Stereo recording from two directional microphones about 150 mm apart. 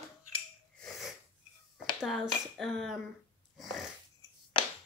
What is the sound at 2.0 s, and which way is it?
Speech, centre (ahead or behind).